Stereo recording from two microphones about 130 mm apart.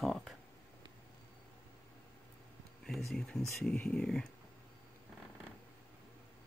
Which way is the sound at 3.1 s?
5° left (ahead or behind).